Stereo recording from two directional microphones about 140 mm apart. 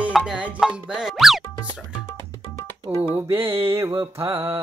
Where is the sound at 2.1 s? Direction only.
15° left (ahead or behind).